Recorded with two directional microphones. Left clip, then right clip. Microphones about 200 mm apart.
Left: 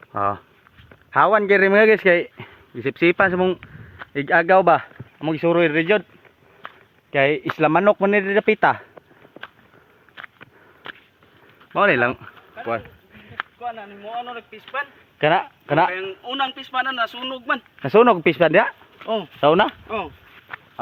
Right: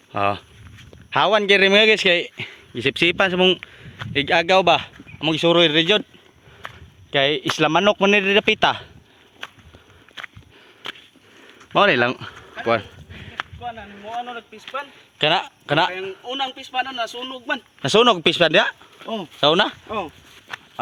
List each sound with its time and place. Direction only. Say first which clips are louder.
0.1 s speech: right 1 dB; 25° right (ahead or behind)
3.6 s a sound: right 3 dB; 60° right (ahead or behind)
4.1 s speech: left 1 dB; 20° right (ahead or behind)
7.1 s speech: even; 20° right (ahead or behind)
11.7 s a sound: right 1 dB; 55° right (ahead or behind)
14.2 s a man's voice: right 1 dB; 30° right (ahead or behind)